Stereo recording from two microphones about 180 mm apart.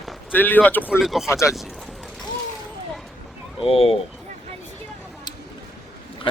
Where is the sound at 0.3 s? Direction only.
10° left (ahead or behind).